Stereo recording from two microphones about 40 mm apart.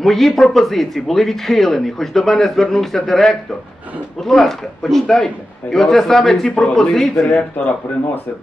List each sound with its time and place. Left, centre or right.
0.0 s speech: centre
7.6 s speech: left